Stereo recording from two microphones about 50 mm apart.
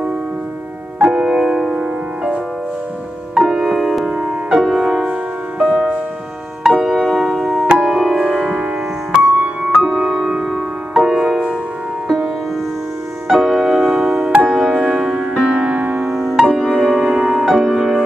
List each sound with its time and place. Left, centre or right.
1.0 s music: centre
1.7 s music: centre
3.3 s music: centre
4.1 s music: centre
4.6 s music: centre
5.6 s music: right
6.6 s music: centre
9.2 s music: right
13.3 s music: centre
15.5 s music: right
16.0 s music: centre